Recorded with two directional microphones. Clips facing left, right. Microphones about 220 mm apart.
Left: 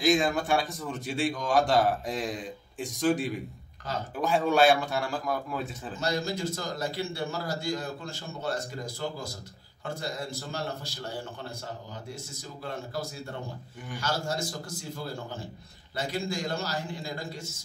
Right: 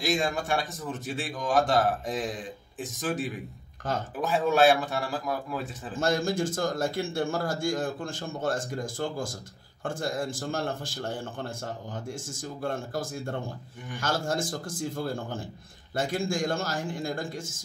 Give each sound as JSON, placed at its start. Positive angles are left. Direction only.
{"t": 0.0, "sound": "speech", "side_deg": 0}
{"t": 3.9, "sound": "a man's voice", "side_deg": -50}
{"t": 4.2, "sound": "speech", "side_deg": 0}
{"t": 5.9, "sound": "a man's voice", "side_deg": -50}